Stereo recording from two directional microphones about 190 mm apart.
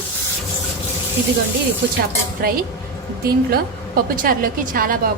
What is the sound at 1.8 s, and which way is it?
Speech, 60° right (ahead or behind).